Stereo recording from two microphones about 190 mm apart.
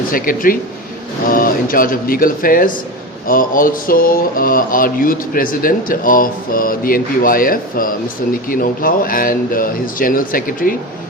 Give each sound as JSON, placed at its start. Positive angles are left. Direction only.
{"t": 0.1, "sound": "mantra", "side_deg": 45}